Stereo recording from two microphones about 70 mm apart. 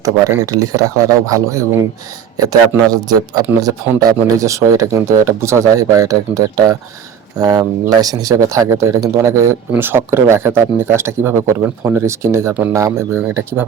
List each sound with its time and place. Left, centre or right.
0.0 s speech: right
13.1 s speech: right